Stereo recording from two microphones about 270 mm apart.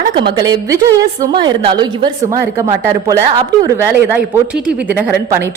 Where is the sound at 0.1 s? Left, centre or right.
Centre.